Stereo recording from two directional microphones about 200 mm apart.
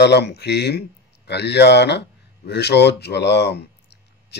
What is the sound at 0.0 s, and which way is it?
A man's voice, 55° left (ahead or behind).